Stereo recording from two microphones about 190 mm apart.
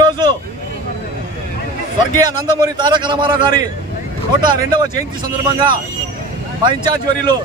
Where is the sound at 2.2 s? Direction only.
20° right (ahead or behind).